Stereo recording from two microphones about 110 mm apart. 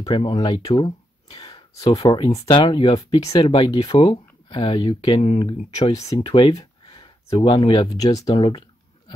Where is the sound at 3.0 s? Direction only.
35° left (ahead or behind).